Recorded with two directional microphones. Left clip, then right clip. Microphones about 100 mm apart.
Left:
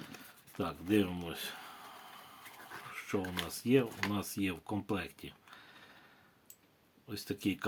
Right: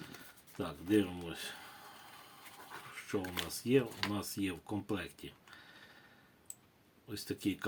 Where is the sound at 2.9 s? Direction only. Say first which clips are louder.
Left 1 dB; 45° left (ahead or behind).